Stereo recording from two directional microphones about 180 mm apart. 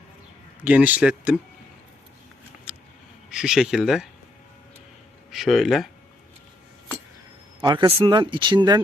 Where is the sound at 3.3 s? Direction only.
5° right (ahead or behind).